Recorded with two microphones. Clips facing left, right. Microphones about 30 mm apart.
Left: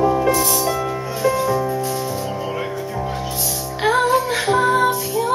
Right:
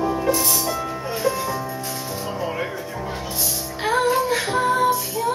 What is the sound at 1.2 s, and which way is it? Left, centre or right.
Music, left.